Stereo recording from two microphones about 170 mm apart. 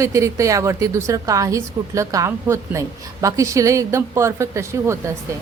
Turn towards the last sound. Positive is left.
turn(degrees=-15)  # may be behind; listen again after turning